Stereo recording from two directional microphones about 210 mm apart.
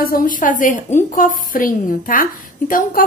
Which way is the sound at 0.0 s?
40° left (ahead or behind).